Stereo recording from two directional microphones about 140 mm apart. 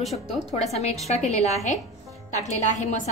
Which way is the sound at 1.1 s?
55° left (ahead or behind).